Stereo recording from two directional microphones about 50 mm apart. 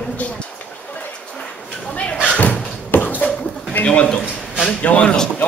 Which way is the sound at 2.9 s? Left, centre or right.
Left.